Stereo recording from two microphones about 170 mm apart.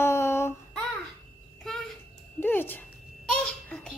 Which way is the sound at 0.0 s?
15° left (ahead or behind).